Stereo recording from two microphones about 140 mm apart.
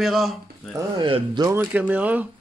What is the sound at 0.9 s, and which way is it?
Speech, 35° right (ahead or behind).